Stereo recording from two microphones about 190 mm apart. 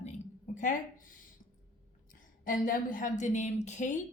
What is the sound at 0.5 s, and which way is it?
Speech, 45° left (ahead or behind).